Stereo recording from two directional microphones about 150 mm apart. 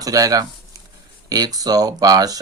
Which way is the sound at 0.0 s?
25° right (ahead or behind).